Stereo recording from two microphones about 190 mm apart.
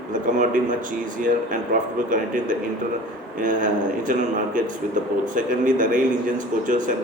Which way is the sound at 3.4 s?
45° right (ahead or behind).